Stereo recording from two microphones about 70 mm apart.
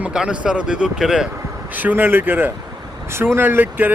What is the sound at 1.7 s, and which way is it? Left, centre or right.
Speech, right.